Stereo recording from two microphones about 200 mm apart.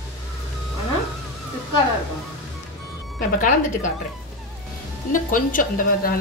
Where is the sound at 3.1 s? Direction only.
40° left (ahead or behind).